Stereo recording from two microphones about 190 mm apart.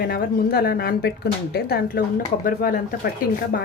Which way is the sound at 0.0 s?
55° left (ahead or behind).